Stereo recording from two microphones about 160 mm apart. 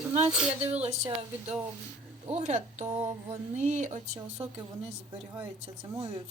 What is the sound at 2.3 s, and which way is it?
Speech, 50° right (ahead or behind).